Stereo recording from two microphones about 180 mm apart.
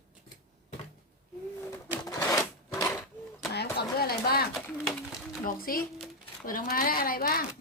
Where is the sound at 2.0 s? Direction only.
20° left (ahead or behind).